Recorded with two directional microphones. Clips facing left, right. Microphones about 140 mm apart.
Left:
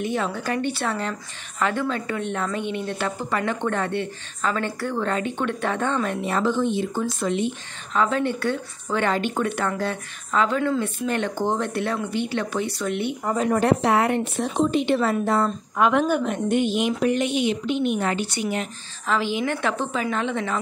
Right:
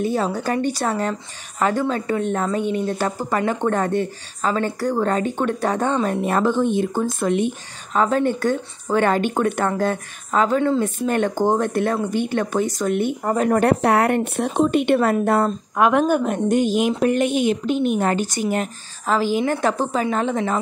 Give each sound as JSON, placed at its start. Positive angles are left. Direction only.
{"t": 0.0, "sound": "a woman's voice", "side_deg": -35}
{"t": 6.0, "sound": "a woman's voice", "side_deg": -50}